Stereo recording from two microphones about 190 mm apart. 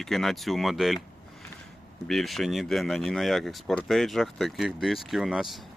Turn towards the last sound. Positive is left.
turn(degrees=0)  # may be behind; listen again after turning